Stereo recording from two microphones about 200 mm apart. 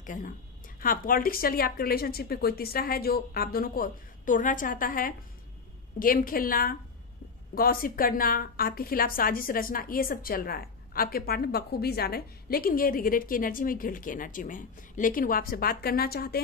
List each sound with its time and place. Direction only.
0.0 s a woman's voice: 40° left (ahead or behind)